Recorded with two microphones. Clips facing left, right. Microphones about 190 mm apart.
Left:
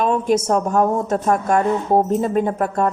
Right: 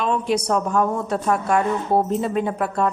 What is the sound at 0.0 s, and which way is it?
A woman's voice, 45° left (ahead or behind).